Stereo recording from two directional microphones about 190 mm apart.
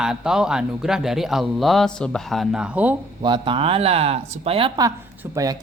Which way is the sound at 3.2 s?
25° right (ahead or behind).